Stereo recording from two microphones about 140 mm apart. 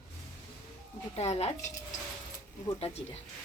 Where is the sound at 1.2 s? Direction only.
45° left (ahead or behind).